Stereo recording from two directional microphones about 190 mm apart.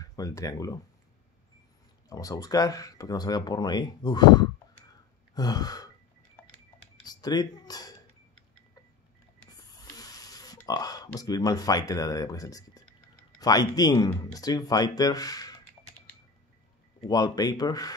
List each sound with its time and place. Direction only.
0.0 s speech: 20° left (ahead or behind)
2.0 s speech: 20° left (ahead or behind)
7.0 s speech: 20° left (ahead or behind)
9.5 s speech: 20° left (ahead or behind)
17.0 s speech: 20° left (ahead or behind)